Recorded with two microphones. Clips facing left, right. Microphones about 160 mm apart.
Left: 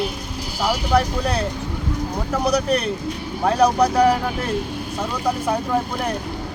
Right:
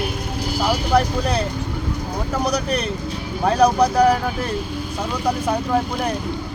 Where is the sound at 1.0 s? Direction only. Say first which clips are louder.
Right 1 dB; centre (ahead or behind).